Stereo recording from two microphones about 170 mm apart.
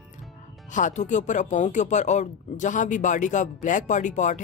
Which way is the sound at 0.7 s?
45° left (ahead or behind).